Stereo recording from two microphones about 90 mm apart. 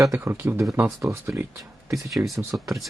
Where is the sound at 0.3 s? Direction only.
30° right (ahead or behind).